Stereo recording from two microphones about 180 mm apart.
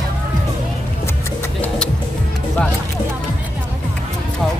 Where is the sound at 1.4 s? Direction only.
5° left (ahead or behind).